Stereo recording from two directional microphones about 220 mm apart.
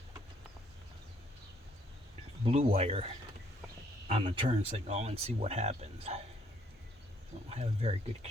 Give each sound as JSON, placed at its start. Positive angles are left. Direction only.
{"t": 2.4, "sound": "speech", "side_deg": -25}
{"t": 4.1, "sound": "speech", "side_deg": -25}
{"t": 7.5, "sound": "speech", "side_deg": -25}